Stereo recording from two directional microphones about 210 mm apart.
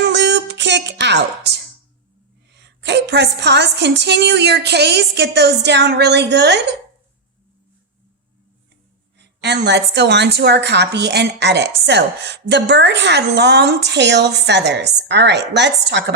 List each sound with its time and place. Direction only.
0.0 s a sound: 55° right (ahead or behind)
2.6 s a woman's voice: 55° right (ahead or behind)
9.1 s a woman's voice: 55° right (ahead or behind)